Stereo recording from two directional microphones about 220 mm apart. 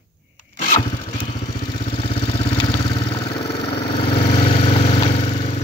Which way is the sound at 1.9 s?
25° left (ahead or behind).